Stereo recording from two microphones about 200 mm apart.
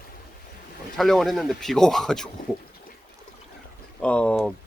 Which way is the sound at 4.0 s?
5° left (ahead or behind).